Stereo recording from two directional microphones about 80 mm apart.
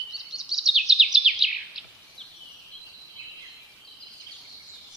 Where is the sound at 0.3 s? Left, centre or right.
Centre.